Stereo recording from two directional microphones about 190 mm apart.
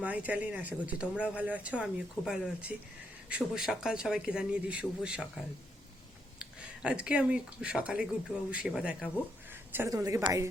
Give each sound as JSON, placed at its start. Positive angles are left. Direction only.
{"t": 0.0, "sound": "a man's voice", "side_deg": -10}
{"t": 6.4, "sound": "a man's voice", "side_deg": -5}